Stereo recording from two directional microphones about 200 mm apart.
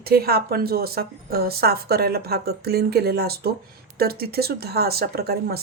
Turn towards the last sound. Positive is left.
turn(degrees=-50)  # may be behind; listen again after turning